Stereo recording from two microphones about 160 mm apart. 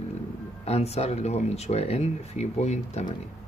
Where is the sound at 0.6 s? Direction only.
40° left (ahead or behind).